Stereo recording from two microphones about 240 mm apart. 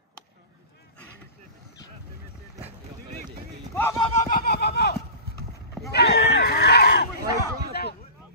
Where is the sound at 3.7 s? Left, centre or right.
Centre.